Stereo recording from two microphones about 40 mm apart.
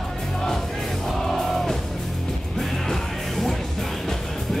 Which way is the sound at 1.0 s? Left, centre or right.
Centre.